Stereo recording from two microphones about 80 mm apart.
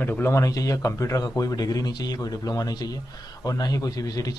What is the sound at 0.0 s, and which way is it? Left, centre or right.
A man's voice, left.